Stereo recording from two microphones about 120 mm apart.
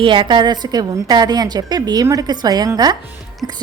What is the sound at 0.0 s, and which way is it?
A woman's voice, 45° right (ahead or behind).